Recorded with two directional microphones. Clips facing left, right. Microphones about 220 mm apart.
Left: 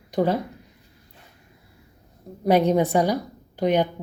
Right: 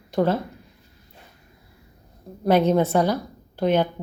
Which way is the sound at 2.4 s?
15° left (ahead or behind).